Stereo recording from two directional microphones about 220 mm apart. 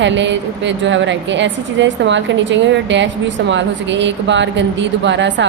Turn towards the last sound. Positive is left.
turn(degrees=-55)  # may be behind; listen again after turning